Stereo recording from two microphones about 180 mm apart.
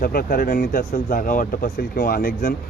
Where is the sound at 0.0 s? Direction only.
55° left (ahead or behind).